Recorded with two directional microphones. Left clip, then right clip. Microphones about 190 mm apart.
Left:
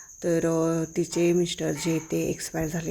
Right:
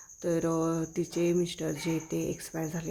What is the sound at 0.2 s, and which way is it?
Cricket, 10° left (ahead or behind).